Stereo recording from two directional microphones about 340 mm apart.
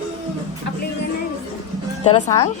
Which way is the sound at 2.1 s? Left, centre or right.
Centre.